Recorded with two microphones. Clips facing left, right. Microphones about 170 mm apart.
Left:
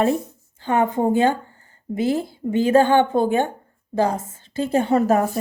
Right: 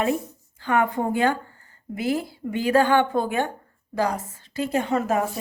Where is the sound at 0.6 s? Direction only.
20° left (ahead or behind).